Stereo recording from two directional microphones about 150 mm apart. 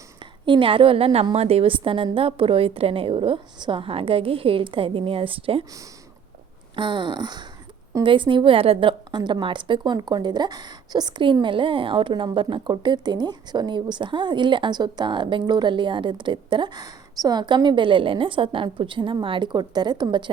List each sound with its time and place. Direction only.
0.4 s a woman's voice: 35° right (ahead or behind)
6.7 s a sound: 30° right (ahead or behind)
8.0 s a woman's voice: 35° right (ahead or behind)